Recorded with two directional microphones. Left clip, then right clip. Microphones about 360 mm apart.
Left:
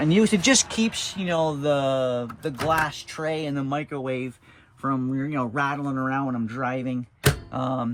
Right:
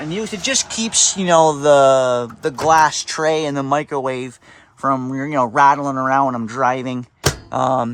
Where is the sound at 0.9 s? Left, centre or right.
Centre.